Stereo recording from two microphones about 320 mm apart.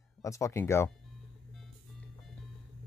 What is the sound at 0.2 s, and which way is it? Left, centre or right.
Speech, centre.